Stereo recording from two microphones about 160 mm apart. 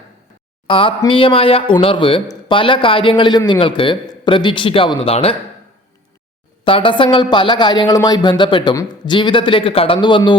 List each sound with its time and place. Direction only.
0.7 s speech: 30° left (ahead or behind)
6.7 s speech: 35° left (ahead or behind)